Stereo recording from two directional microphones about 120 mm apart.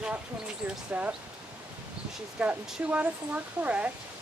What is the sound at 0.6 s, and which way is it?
Speech, 10° right (ahead or behind).